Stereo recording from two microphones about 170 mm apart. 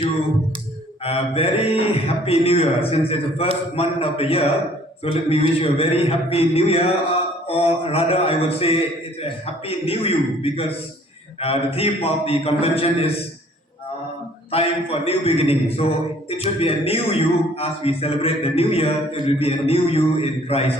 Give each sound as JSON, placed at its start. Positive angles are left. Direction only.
{"t": 1.0, "sound": "a man's voice", "side_deg": 35}
{"t": 14.5, "sound": "a man's voice", "side_deg": 35}